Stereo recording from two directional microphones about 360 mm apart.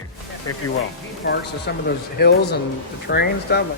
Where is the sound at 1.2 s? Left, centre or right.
Left.